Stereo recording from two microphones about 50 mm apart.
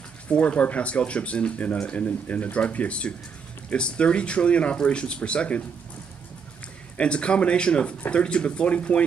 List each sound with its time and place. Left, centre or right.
0.3 s speech: left
7.0 s speech: left